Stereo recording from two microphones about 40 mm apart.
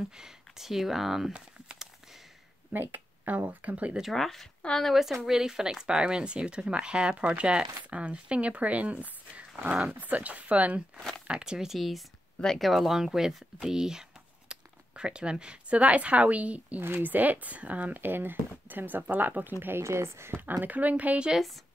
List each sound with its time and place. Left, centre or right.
0.1 s speech: centre
2.7 s speech: right
3.3 s speech: right
4.1 s speech: centre
4.9 s speech: centre; by 10.8 s right
11.2 s speech: right
11.7 s speech: centre; by 18.0 s right
18.0 s speech: right
19.7 s speech: right
20.6 s speech: right